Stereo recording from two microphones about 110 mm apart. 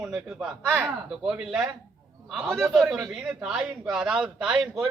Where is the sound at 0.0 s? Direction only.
5° right (ahead or behind).